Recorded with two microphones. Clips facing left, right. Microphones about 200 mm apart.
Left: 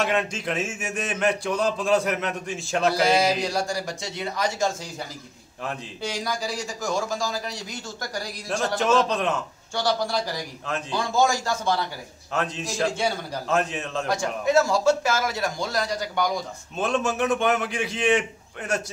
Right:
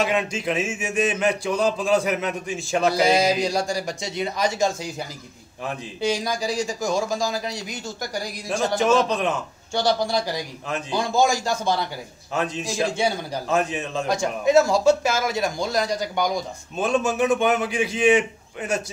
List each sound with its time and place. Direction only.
0.0 s speech: centre (ahead or behind)
2.9 s speech: 15° right (ahead or behind)
5.7 s speech: 15° right (ahead or behind)
9.8 s speech: 15° right (ahead or behind)
16.7 s speech: centre (ahead or behind)